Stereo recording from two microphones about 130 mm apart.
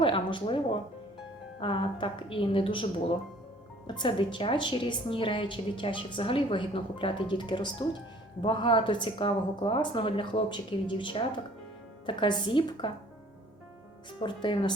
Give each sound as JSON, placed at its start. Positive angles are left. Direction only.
{"t": 0.0, "sound": "a woman's voice", "side_deg": 40}
{"t": 3.8, "sound": "a woman's voice", "side_deg": 35}
{"t": 14.2, "sound": "a woman's voice", "side_deg": 40}